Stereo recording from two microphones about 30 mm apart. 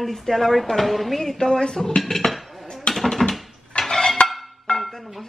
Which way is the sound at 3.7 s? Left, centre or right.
Left.